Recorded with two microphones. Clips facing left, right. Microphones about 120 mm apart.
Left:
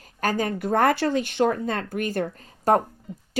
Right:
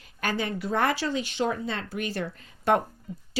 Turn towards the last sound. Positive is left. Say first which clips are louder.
# left 1 dB
turn(degrees=35)  # may be behind; listen again after turning